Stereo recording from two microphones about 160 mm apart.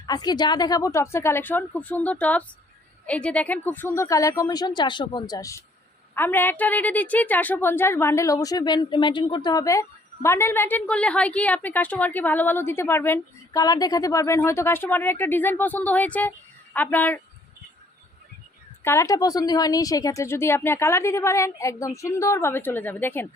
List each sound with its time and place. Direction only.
0.0 s a woman's voice: 25° left (ahead or behind)
18.8 s a woman's voice: 15° left (ahead or behind)